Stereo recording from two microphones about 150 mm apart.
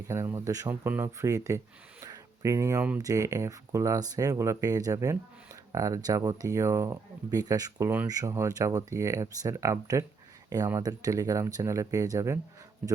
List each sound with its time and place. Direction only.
0.1 s speech: 20° right (ahead or behind)
0.7 s a man's voice: 10° right (ahead or behind)